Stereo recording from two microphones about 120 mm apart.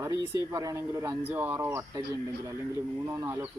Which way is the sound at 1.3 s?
15° right (ahead or behind).